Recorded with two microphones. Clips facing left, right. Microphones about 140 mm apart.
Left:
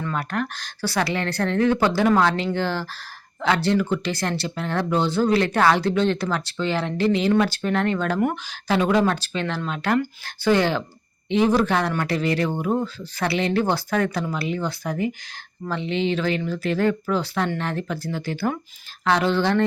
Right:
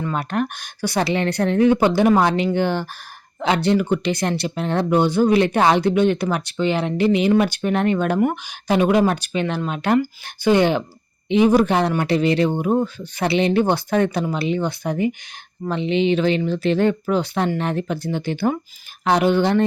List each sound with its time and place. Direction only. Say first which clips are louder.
0.0 s speech: right 4 dB; 20° right (ahead or behind)